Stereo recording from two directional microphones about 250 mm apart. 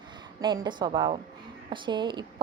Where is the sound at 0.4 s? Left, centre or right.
Centre.